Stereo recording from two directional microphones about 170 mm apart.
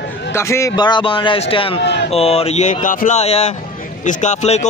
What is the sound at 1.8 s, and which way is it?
Speech, 90° left.